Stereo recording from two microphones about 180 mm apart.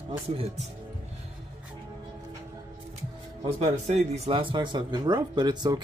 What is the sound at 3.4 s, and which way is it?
Speech, 35° right (ahead or behind).